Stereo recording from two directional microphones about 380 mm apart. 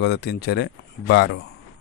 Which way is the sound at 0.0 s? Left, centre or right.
Left.